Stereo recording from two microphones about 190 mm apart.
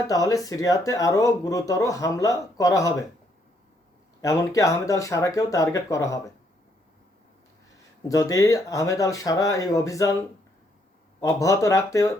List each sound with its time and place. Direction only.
0.1 s speech: 20° left (ahead or behind)
4.2 s speech: 15° left (ahead or behind)
8.0 s speech: 15° left (ahead or behind)
11.2 s speech: 15° left (ahead or behind)